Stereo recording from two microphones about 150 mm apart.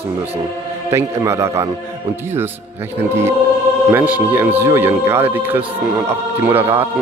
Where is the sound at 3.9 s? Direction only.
10° right (ahead or behind).